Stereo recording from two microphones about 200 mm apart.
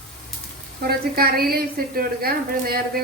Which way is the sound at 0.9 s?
50° right (ahead or behind).